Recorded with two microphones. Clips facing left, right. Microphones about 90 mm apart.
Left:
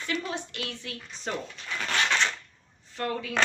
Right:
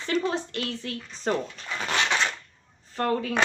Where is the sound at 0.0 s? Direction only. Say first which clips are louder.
Right 6 dB; 35° right (ahead or behind).